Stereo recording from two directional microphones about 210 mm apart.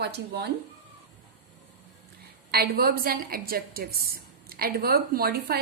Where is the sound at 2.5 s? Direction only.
45° right (ahead or behind).